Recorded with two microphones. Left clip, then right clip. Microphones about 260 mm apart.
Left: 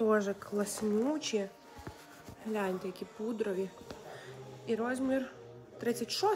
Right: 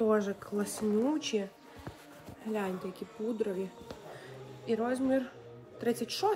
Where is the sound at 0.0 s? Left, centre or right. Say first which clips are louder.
Right 1 dB; centre.